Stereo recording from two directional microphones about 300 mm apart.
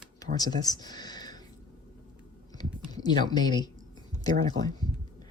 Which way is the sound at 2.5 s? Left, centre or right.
Centre.